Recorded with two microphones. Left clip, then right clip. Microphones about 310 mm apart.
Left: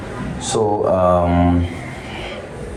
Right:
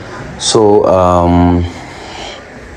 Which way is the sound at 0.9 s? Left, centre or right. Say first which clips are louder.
Right 6 dB; right.